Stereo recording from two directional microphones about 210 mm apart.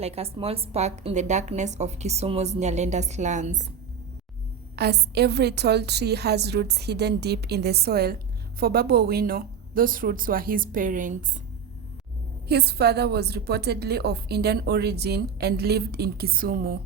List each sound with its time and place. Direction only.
0.0 s a woman's voice: 30° right (ahead or behind)
4.8 s a woman's voice: 50° right (ahead or behind)
12.5 s a woman's voice: 50° right (ahead or behind)